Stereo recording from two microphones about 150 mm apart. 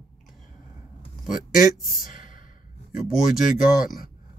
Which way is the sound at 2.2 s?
65° left (ahead or behind).